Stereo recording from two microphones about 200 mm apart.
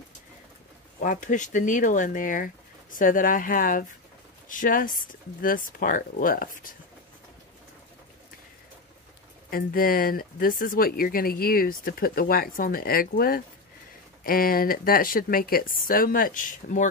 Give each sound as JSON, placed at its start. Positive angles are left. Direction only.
{"t": 0.9, "sound": "speech", "side_deg": 40}
{"t": 9.5, "sound": "speech", "side_deg": 45}